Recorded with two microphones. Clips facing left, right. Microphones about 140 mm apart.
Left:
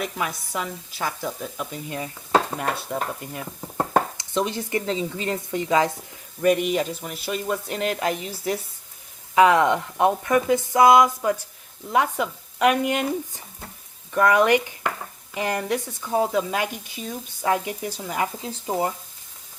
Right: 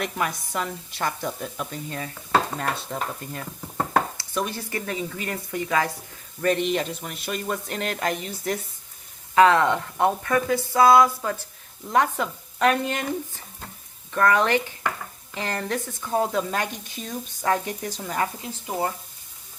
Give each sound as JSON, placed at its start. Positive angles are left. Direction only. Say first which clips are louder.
{"t": 0.0, "sound": "speech", "louder": "right 1 dB", "side_deg": 0}
{"t": 1.7, "sound": "speech", "louder": "left 1 dB", "side_deg": 15}
{"t": 2.6, "sound": "stir", "louder": "left 2 dB", "side_deg": 10}
{"t": 6.4, "sound": "speech", "louder": "left 3 dB", "side_deg": 10}